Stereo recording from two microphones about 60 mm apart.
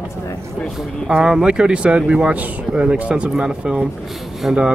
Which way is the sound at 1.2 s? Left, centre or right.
Centre.